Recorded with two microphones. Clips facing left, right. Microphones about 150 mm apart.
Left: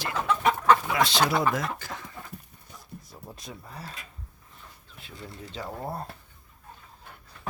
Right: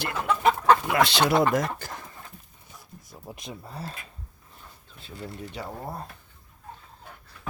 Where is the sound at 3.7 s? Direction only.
30° right (ahead or behind).